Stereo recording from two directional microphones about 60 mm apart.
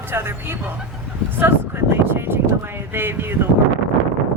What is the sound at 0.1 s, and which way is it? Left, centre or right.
Speech, right.